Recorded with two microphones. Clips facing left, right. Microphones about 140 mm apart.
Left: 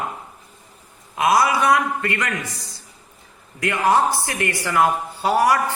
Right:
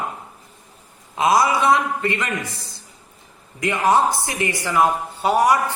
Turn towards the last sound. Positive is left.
turn(degrees=-20)  # may be behind; listen again after turning